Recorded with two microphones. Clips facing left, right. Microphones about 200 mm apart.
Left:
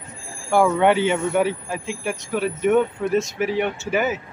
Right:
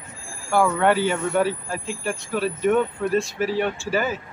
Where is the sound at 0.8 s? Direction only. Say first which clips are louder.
Left 2 dB; 20° left (ahead or behind).